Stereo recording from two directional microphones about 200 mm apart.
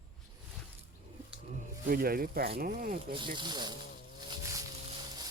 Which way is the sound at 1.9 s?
50° right (ahead or behind).